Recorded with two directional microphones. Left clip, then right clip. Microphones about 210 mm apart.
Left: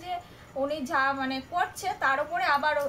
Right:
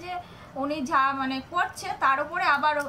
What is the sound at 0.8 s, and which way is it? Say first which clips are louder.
A woman's voice: right 5 dB; 10° left (ahead or behind).